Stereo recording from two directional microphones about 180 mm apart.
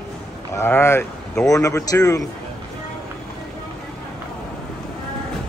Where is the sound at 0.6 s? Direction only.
15° left (ahead or behind).